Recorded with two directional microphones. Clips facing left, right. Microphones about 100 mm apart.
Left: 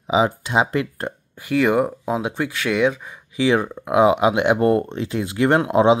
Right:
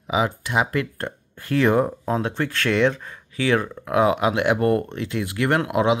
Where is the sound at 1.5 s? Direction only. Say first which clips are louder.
Left 1 dB; 5° left (ahead or behind).